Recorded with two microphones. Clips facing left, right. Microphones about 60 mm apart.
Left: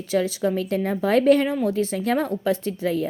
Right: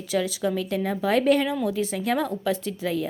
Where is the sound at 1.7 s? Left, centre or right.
Left.